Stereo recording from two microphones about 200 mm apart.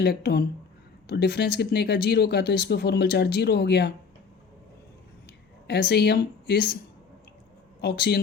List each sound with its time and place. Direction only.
0.0 s speech: 55° left (ahead or behind)
5.6 s speech: 55° left (ahead or behind)
7.8 s speech: 55° left (ahead or behind)